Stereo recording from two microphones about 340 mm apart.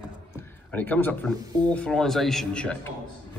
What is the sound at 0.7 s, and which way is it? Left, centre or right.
Speech, centre.